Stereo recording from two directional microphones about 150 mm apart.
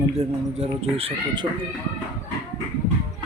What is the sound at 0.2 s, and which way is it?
Speech, 45° right (ahead or behind).